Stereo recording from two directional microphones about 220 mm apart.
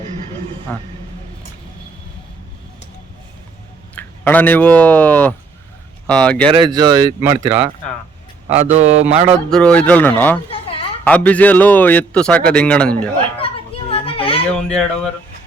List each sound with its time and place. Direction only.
0.7 s a man's voice: 10° left (ahead or behind)
3.9 s speech: 10° left (ahead or behind)
6.5 s speech: 20° right (ahead or behind)
8.7 s speech: 30° right (ahead or behind)
9.5 s a man's voice: 5° left (ahead or behind)
10.5 s a sound: 25° left (ahead or behind)
11.0 s a man's voice: 5° left (ahead or behind)
13.4 s children playing: 25° left (ahead or behind)
14.5 s speech: 5° left (ahead or behind)